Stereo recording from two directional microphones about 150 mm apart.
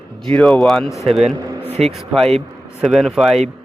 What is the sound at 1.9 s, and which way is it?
Speech, centre (ahead or behind).